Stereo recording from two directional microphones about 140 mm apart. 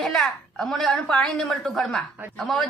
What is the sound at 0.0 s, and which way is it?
A woman's voice, 5° left (ahead or behind).